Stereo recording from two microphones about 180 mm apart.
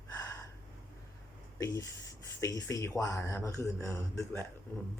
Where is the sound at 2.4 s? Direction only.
15° left (ahead or behind).